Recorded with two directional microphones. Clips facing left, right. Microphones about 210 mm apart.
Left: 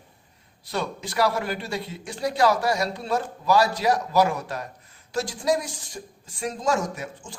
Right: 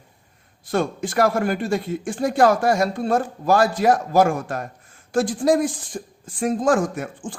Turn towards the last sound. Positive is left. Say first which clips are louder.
# right 6 dB
turn(degrees=-50)  # may be behind; listen again after turning